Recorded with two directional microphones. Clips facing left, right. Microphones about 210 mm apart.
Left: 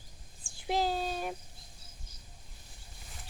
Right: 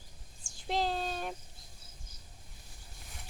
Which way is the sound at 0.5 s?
5° left (ahead or behind).